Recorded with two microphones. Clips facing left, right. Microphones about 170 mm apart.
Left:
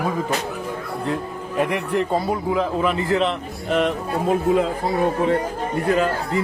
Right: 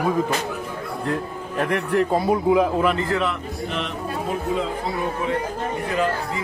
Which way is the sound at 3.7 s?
45° left (ahead or behind).